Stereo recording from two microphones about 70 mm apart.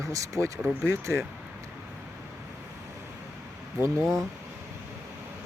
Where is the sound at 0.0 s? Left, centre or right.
Right.